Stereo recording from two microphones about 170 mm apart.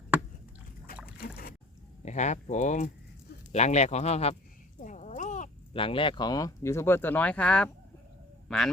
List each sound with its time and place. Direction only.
2.0 s speech: 45° left (ahead or behind)
4.8 s a sound: 45° left (ahead or behind)
5.7 s speech: 30° left (ahead or behind); by 8.7 s centre (ahead or behind)